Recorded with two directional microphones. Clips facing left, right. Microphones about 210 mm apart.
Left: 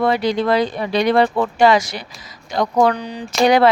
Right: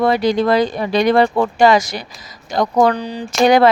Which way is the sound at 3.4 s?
45° right (ahead or behind).